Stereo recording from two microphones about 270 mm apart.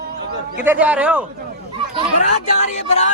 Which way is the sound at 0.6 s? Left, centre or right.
Centre.